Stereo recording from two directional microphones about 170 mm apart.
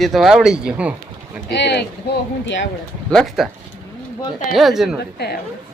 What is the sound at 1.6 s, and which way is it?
Speech, 85° left.